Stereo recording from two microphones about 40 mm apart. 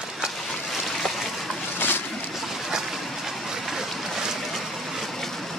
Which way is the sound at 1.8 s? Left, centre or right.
Left.